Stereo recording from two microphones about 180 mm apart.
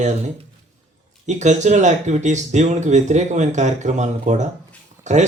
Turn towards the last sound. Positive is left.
turn(degrees=-40)  # may be behind; listen again after turning